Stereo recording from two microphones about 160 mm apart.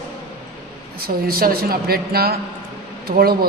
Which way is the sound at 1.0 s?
70° right (ahead or behind).